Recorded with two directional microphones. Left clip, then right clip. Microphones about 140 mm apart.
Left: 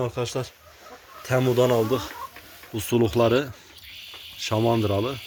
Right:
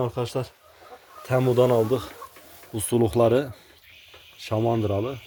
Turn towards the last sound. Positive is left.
turn(degrees=0)  # may be behind; listen again after turning